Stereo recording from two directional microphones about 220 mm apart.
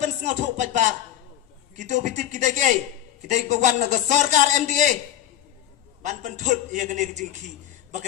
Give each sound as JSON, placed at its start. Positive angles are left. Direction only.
{"t": 0.0, "sound": "music", "side_deg": -35}
{"t": 1.7, "sound": "a man's voice", "side_deg": -35}
{"t": 6.0, "sound": "a man's voice", "side_deg": -35}